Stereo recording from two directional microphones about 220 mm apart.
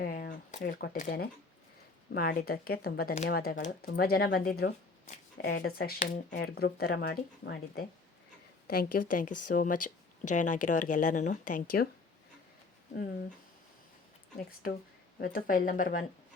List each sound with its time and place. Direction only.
0.0 s a sound: 50° left (ahead or behind)
0.5 s speech: 45° left (ahead or behind)
15.2 s speech: 40° left (ahead or behind)